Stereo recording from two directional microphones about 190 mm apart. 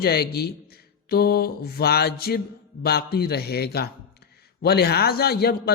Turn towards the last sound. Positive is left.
turn(degrees=55)  # may be behind; listen again after turning